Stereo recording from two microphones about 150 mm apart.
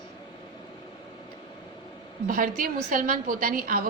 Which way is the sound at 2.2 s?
65° right (ahead or behind).